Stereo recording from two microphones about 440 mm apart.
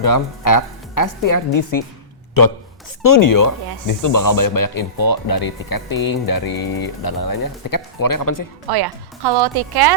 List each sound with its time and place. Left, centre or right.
0.0 s speech: left
8.7 s speech: right